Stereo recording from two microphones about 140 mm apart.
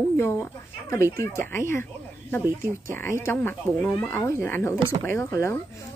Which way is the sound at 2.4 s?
15° right (ahead or behind).